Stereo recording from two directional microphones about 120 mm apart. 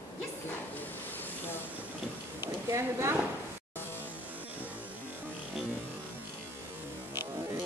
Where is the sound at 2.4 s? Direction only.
25° right (ahead or behind).